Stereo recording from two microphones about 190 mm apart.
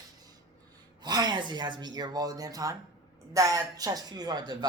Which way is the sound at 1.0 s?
20° right (ahead or behind).